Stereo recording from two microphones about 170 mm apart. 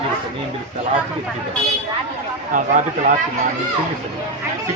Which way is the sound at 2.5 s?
50° right (ahead or behind).